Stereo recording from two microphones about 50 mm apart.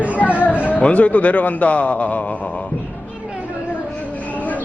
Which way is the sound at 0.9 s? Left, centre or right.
Left.